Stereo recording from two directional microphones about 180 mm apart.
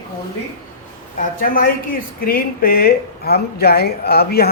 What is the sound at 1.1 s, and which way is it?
Speech, 50° left (ahead or behind).